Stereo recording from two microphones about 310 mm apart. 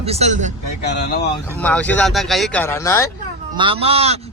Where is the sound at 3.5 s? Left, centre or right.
Centre.